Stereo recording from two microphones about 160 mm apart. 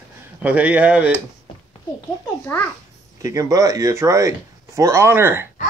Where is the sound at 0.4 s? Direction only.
10° right (ahead or behind).